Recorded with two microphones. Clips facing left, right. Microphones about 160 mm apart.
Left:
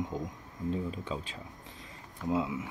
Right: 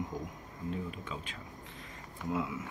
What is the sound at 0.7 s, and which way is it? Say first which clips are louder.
Speech: left 5 dB; 30° left (ahead or behind).